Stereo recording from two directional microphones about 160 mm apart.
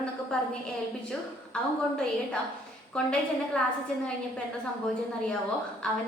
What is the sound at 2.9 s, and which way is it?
Speech, 5° left (ahead or behind).